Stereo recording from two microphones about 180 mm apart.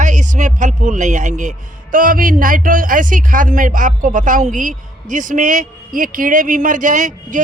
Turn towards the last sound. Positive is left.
turn(degrees=-45)  # may be behind; listen again after turning